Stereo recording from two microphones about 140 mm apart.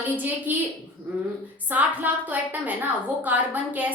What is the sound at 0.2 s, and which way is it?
Speech, 10° right (ahead or behind).